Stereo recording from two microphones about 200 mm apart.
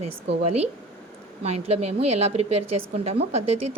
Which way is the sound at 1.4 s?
30° right (ahead or behind).